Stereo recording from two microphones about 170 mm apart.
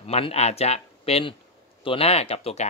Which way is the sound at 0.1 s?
35° left (ahead or behind).